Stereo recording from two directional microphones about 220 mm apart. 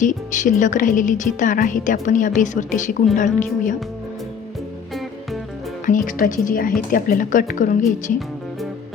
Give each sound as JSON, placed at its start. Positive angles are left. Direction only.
{"t": 0.0, "sound": "speech", "side_deg": 35}
{"t": 5.8, "sound": "speech", "side_deg": 35}